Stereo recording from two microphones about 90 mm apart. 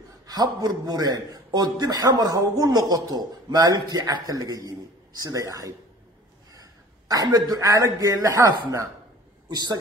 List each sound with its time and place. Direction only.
0.3 s a man's voice: 45° right (ahead or behind)
9.5 s a man's voice: 50° right (ahead or behind)